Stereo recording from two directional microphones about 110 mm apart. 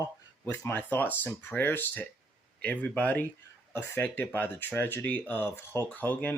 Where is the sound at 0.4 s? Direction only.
25° left (ahead or behind).